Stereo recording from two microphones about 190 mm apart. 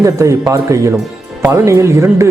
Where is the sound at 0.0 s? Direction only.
20° right (ahead or behind).